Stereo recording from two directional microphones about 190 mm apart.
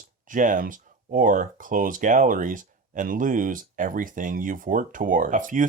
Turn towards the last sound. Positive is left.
turn(degrees=-45)  # may be behind; listen again after turning